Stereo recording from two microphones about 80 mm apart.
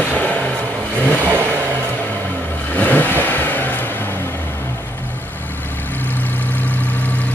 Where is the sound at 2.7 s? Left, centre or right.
Left.